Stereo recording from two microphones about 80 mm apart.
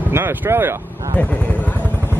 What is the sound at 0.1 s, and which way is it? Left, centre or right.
Speech, right.